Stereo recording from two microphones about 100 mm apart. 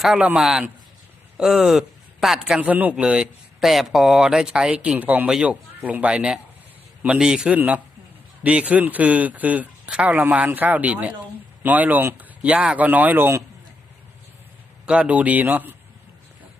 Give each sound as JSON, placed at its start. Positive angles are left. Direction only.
{"t": 0.0, "sound": "speech", "side_deg": -5}
{"t": 14.8, "sound": "speech", "side_deg": -10}